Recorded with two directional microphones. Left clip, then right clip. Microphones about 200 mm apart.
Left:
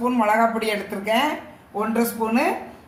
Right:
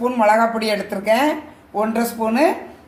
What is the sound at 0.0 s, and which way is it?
Speech, 40° right (ahead or behind).